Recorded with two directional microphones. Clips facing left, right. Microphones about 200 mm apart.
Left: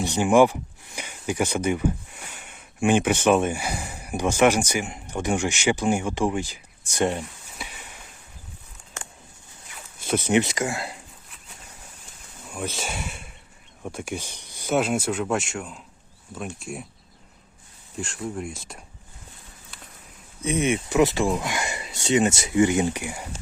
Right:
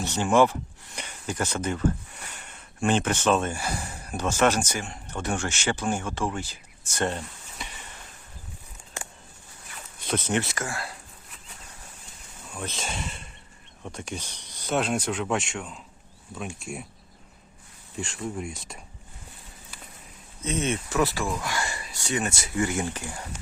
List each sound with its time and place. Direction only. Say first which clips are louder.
0.0 s speech: left 3 dB; 15° left (ahead or behind)
10.1 s speech: left 5 dB; 10° left (ahead or behind)
12.5 s speech: left 3 dB; 10° left (ahead or behind)
17.9 s speech: left 1 dB; centre (ahead or behind)
20.4 s speech: left 4 dB; 15° left (ahead or behind)